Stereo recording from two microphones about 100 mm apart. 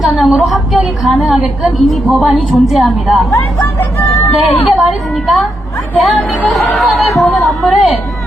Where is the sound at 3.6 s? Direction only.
30° left (ahead or behind).